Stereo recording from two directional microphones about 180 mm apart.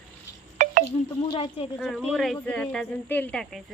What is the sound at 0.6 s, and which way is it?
Wind chime, 45° right (ahead or behind).